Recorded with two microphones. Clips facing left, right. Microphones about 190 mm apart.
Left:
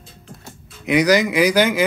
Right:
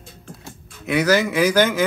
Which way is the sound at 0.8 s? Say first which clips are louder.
Left 2 dB; 15° left (ahead or behind).